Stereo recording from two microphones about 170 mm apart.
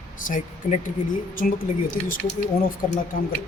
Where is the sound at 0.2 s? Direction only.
50° left (ahead or behind).